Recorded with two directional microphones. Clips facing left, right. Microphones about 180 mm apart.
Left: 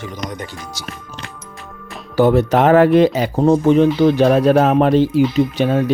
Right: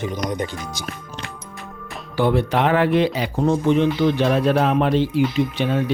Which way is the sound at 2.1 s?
40° left (ahead or behind).